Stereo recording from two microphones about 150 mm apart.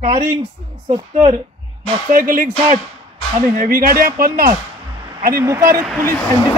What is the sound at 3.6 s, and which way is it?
Speech, 75° right (ahead or behind).